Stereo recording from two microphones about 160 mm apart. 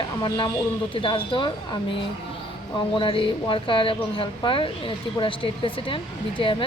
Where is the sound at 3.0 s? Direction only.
35° left (ahead or behind).